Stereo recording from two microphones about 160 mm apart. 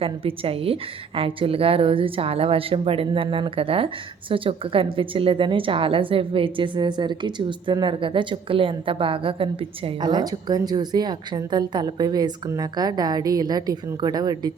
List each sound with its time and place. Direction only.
0.0 s a woman's voice: 35° right (ahead or behind)